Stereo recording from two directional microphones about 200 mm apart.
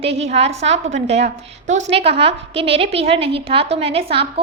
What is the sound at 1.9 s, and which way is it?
A woman's voice, 30° right (ahead or behind).